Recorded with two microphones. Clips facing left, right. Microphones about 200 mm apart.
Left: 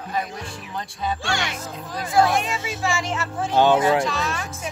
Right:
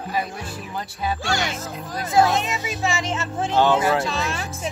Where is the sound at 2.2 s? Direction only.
20° right (ahead or behind).